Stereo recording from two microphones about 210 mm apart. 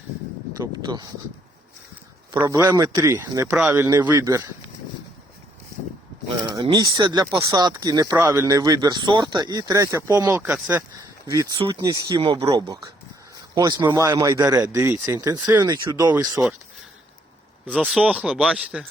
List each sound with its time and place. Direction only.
0.6 s speech: 20° right (ahead or behind)
2.4 s speech: 15° right (ahead or behind)
6.2 s speech: 20° right (ahead or behind)
17.7 s speech: centre (ahead or behind)